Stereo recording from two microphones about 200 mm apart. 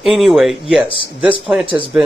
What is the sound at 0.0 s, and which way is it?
Speech, centre (ahead or behind).